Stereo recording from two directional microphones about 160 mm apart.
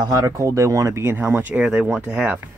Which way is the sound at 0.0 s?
20° right (ahead or behind).